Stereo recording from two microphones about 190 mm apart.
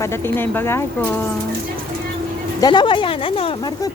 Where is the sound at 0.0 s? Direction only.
10° left (ahead or behind).